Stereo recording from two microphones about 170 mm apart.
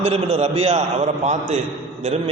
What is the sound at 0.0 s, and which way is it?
A man's voice, 35° right (ahead or behind).